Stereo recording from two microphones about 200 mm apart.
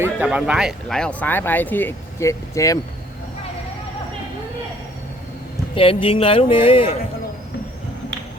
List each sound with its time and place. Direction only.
0.0 s speech: 10° right (ahead or behind); by 2.7 s 15° left (ahead or behind)
5.7 s speech: 25° left (ahead or behind)